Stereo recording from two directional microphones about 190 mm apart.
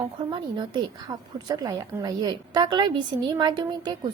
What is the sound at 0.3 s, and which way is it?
A woman's voice, 25° right (ahead or behind).